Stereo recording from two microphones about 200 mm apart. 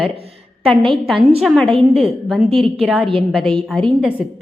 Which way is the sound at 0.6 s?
25° right (ahead or behind).